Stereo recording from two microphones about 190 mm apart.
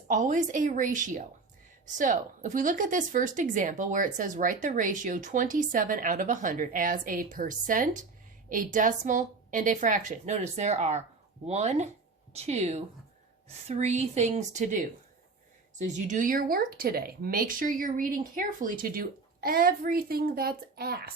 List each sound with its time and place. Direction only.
0.1 s a woman's voice: 40° right (ahead or behind)
15.9 s speech: 40° right (ahead or behind)